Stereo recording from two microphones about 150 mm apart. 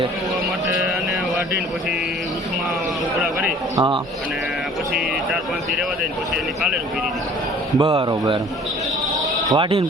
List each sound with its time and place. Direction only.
3.8 s speech: 30° right (ahead or behind)
7.8 s speech: 30° right (ahead or behind)
9.5 s speech: 35° right (ahead or behind)